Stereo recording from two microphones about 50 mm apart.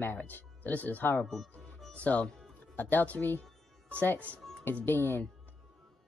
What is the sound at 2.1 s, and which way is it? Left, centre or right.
A woman's voice, left.